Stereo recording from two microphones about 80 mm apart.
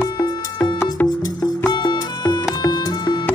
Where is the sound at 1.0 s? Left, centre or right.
Left.